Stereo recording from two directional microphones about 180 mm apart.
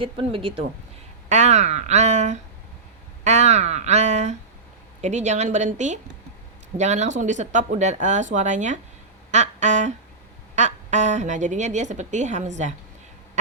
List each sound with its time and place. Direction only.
0.0 s speech: 30° right (ahead or behind)
9.3 s a sound: 40° right (ahead or behind)
10.5 s speech: 40° right (ahead or behind)